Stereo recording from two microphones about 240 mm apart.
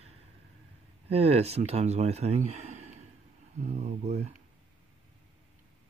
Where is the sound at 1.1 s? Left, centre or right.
Right.